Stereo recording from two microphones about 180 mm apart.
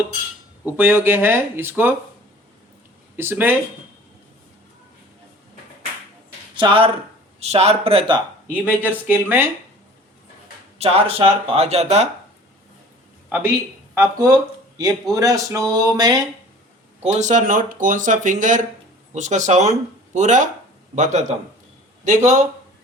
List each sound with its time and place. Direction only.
0.6 s speech: 10° right (ahead or behind)
3.2 s speech: 10° right (ahead or behind)
6.6 s a man's voice: 30° right (ahead or behind)
8.4 s speech: 10° right (ahead or behind)
10.8 s speech: 35° right (ahead or behind)
13.9 s a man's voice: 15° right (ahead or behind)
17.0 s speech: 40° right (ahead or behind)